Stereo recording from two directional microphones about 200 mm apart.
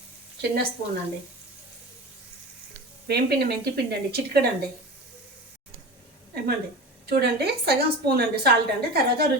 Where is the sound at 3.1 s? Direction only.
55° right (ahead or behind).